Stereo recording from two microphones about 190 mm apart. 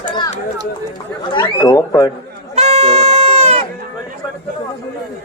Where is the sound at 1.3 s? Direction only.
25° left (ahead or behind).